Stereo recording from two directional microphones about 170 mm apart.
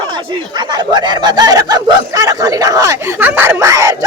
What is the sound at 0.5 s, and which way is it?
Speech, 25° right (ahead or behind).